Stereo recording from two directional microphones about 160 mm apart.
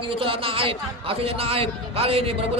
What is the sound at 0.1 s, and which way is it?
A man's voice, 35° right (ahead or behind).